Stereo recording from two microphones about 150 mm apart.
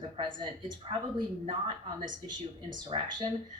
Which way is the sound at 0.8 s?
35° right (ahead or behind).